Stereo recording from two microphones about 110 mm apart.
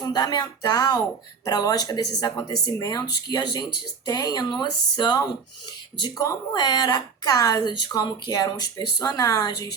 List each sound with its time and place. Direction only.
0.0 s a woman's voice: 40° left (ahead or behind)